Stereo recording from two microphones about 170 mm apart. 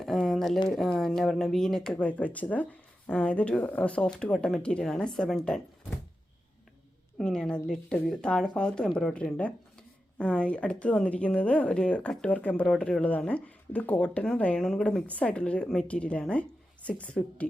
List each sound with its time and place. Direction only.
0.0 s a sound: centre (ahead or behind)
0.7 s speech: centre (ahead or behind)
7.2 s a woman's voice: 5° left (ahead or behind)